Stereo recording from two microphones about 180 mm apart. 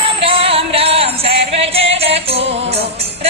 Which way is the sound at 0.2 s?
30° right (ahead or behind).